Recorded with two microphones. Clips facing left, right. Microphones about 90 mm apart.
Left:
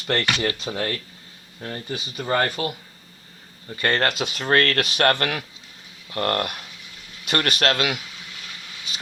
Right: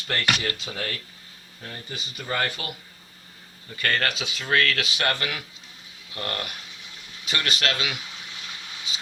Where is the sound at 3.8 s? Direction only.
35° left (ahead or behind).